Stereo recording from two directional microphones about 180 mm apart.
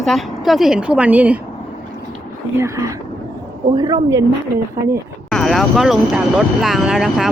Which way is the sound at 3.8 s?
20° right (ahead or behind).